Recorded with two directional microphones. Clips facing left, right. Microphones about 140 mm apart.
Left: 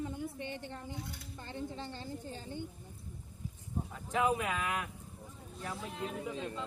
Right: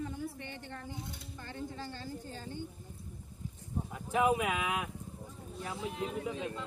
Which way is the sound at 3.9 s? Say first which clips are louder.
Right 3 dB; 10° right (ahead or behind).